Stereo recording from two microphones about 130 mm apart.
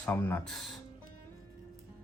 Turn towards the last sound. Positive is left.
turn(degrees=5)  # may be behind; listen again after turning